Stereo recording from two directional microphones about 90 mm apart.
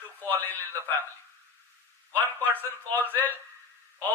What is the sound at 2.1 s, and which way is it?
Speech, 20° left (ahead or behind).